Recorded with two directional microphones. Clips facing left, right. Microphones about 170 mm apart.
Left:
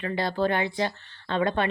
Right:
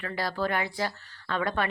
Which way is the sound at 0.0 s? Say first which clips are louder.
Left 4 dB; 25° left (ahead or behind).